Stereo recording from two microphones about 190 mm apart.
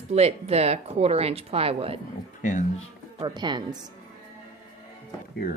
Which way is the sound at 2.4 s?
40° left (ahead or behind).